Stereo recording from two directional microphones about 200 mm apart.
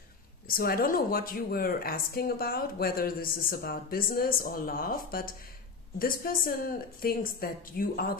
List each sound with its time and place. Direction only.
0.5 s speech: 45° left (ahead or behind)